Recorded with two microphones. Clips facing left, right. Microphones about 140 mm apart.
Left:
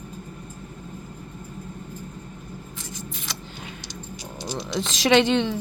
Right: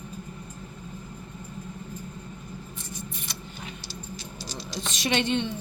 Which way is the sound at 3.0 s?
90° left.